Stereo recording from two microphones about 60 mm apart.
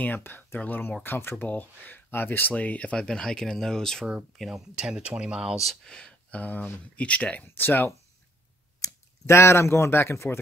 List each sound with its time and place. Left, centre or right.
0.0 s speech: left
2.5 s speech: left
4.5 s speech: centre
5.9 s a sound: centre
6.4 s speech: left
8.8 s a sound: left
9.2 s speech: left